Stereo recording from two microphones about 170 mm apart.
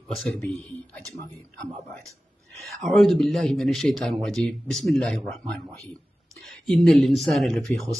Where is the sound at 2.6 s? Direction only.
Centre (ahead or behind).